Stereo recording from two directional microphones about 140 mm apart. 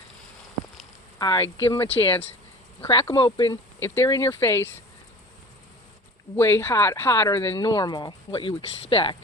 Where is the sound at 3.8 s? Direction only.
15° left (ahead or behind).